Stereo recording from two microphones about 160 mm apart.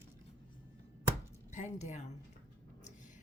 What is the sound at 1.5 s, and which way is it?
Speech, 50° left (ahead or behind).